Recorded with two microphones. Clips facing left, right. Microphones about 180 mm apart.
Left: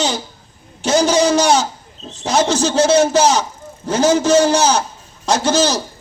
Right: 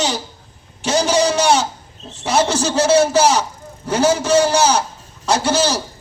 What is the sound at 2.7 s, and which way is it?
A man's voice, 35° left (ahead or behind).